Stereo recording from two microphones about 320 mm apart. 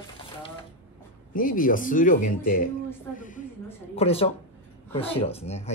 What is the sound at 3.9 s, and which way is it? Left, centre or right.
Speech, centre.